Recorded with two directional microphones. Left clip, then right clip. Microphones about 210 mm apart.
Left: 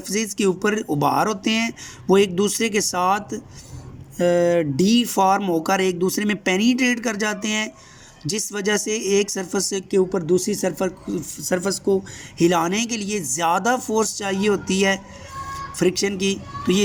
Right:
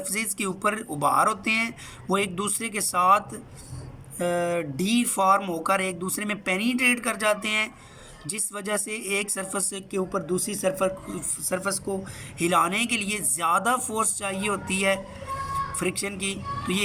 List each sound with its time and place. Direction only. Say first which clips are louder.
0.3 s speech: left 7 dB; 25° left (ahead or behind)